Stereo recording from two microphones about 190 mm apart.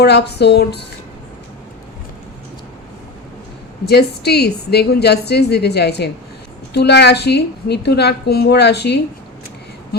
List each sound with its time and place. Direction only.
0.0 s a woman's voice: 60° left (ahead or behind)
3.8 s a woman's voice: 60° left (ahead or behind)